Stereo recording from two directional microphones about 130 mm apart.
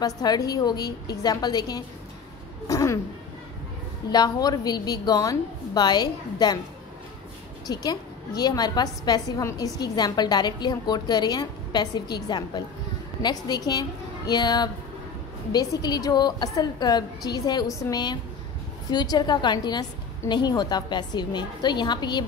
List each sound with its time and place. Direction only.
0.0 s a woman's voice: 30° left (ahead or behind)
4.1 s a woman's voice: 30° left (ahead or behind)
7.6 s a woman's voice: 30° left (ahead or behind)